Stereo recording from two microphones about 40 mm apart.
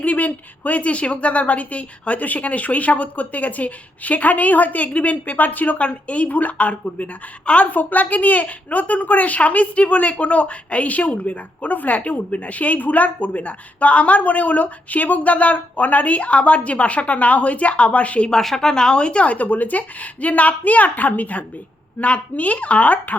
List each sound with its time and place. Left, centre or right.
0.0 s a sound: left
0.3 s a woman's voice: left
7.7 s a woman's voice: left
18.3 s a woman's voice: centre; by 23.1 s left